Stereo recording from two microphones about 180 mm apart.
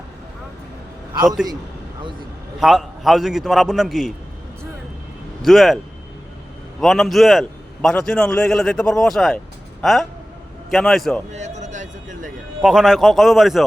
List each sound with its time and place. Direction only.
2.6 s a man's voice: centre (ahead or behind)
5.4 s a man's voice: centre (ahead or behind)
11.3 s a sound: 40° right (ahead or behind)
12.6 s a man's voice: centre (ahead or behind)